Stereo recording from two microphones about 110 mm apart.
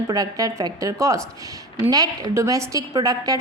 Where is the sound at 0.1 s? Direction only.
30° right (ahead or behind).